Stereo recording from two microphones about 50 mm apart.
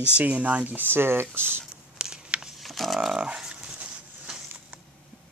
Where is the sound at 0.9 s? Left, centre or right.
Right.